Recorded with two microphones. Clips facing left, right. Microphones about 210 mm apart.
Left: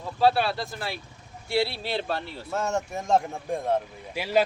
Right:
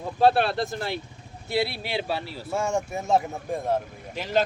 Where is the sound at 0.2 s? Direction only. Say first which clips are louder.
Right 2 dB; 50° right (ahead or behind).